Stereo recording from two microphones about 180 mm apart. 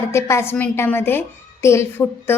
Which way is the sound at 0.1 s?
15° left (ahead or behind).